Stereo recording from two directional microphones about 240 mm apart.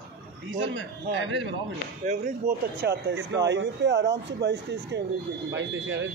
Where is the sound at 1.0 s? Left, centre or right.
Right.